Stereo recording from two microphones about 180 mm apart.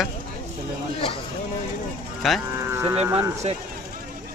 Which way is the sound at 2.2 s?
Centre (ahead or behind).